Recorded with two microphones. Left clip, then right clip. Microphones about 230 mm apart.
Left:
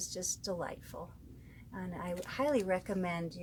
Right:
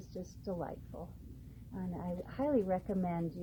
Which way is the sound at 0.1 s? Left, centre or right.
Left.